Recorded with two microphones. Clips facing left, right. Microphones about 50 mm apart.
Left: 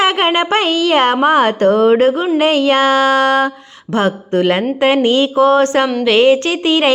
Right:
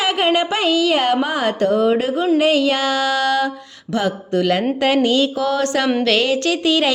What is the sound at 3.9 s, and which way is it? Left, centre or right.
Music, left.